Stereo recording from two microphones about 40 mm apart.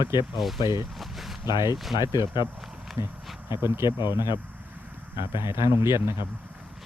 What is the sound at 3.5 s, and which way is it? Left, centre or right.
Speech, right.